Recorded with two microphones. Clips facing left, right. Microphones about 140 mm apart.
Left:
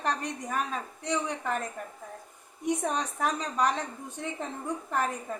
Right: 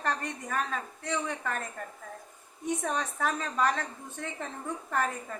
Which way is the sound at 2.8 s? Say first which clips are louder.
Left 1 dB; 15° left (ahead or behind).